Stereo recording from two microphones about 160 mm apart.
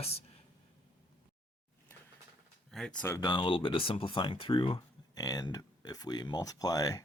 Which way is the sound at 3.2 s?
30° left (ahead or behind).